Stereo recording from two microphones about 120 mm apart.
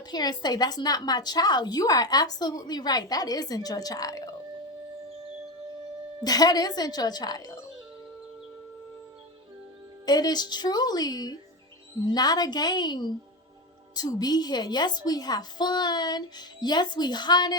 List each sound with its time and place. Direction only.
0.1 s a woman's voice: 35° left (ahead or behind)
6.2 s a woman's voice: 35° left (ahead or behind)
10.1 s a woman's voice: 35° left (ahead or behind)